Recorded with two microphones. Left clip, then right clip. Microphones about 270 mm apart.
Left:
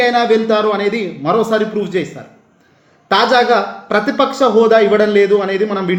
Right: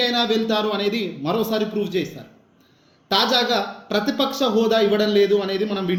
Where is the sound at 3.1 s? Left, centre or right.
Left.